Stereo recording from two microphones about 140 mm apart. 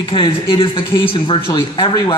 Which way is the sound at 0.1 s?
40° left (ahead or behind).